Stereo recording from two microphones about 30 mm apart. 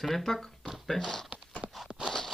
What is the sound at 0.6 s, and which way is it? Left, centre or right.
Speech, centre.